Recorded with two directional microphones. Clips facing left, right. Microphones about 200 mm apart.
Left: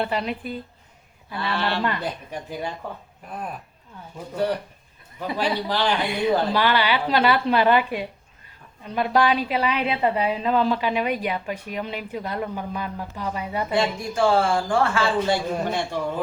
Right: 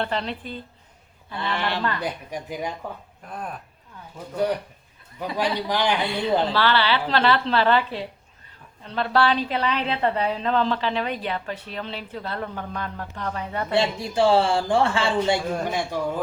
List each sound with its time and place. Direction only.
0.0 s a woman's voice: 10° left (ahead or behind)
1.4 s speech: 15° right (ahead or behind)
3.2 s speech: 5° left (ahead or behind)
5.5 s speech: 15° right (ahead or behind)
6.1 s a woman's voice: 20° left (ahead or behind)
13.7 s speech: 30° right (ahead or behind)
15.6 s speech: 10° right (ahead or behind)